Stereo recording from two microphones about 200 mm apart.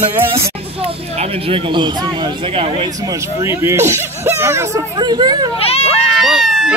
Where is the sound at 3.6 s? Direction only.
15° right (ahead or behind).